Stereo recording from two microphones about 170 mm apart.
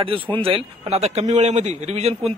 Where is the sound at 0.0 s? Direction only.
30° right (ahead or behind).